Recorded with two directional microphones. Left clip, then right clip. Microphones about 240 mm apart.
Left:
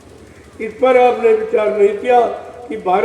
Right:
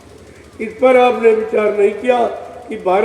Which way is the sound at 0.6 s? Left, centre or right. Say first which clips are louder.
Right 1 dB; right.